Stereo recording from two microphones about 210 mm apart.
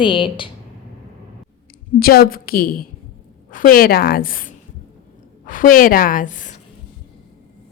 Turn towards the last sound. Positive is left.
turn(degrees=35)  # may be behind; listen again after turning